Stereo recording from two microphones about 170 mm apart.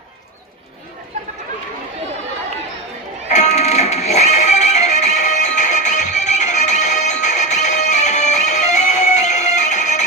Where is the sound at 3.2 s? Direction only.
45° left (ahead or behind).